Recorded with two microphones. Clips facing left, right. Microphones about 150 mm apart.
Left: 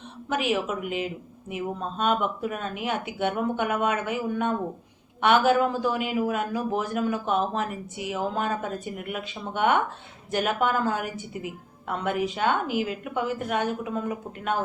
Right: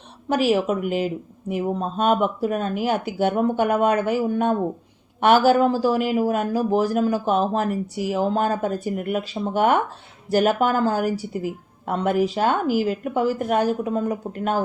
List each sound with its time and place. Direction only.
0.3 s a woman's voice: 35° right (ahead or behind)